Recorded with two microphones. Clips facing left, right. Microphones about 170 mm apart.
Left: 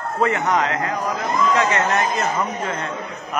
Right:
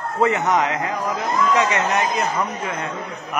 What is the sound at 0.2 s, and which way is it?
A man's voice, 20° right (ahead or behind).